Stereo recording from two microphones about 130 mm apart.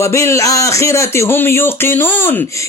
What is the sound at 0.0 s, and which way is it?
Speech, 20° left (ahead or behind).